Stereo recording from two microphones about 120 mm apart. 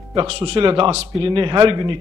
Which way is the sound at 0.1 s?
40° right (ahead or behind).